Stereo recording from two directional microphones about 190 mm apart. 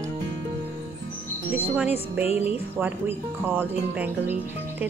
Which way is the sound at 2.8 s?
10° right (ahead or behind).